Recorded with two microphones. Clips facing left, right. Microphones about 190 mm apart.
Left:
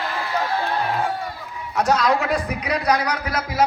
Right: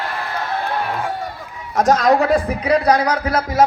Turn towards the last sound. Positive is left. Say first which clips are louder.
# right 6 dB
turn(degrees=-30)  # may be behind; listen again after turning